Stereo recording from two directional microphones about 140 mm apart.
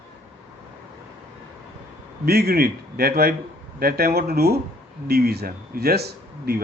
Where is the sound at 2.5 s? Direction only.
90° right.